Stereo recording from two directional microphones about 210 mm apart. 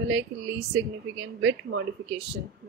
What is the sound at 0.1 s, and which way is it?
Speech, 60° right (ahead or behind).